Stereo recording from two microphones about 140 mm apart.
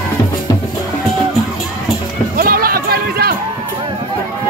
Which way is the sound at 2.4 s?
90° right.